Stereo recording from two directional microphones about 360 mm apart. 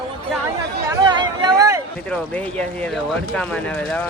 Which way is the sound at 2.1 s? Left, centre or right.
Centre.